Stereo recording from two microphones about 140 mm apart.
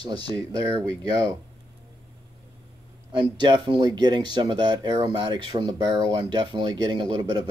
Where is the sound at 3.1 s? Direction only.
35° right (ahead or behind).